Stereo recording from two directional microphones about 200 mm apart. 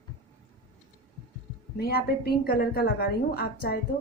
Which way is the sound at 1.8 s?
50° left (ahead or behind).